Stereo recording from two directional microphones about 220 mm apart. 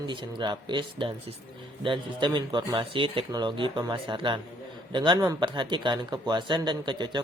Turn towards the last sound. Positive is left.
turn(degrees=-20)  # may be behind; listen again after turning